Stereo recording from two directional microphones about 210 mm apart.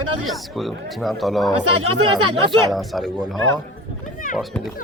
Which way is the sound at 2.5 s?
Centre (ahead or behind).